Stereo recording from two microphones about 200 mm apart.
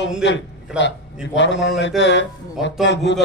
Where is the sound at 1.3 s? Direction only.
65° left (ahead or behind).